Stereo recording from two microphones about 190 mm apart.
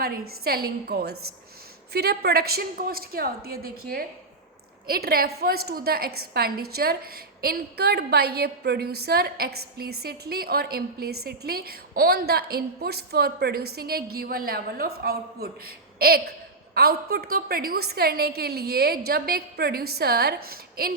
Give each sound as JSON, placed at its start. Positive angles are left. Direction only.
{"t": 0.0, "sound": "a woman's voice", "side_deg": -55}